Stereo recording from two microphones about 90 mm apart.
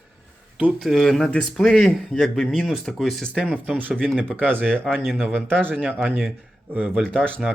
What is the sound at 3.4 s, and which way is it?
Speech, 15° right (ahead or behind).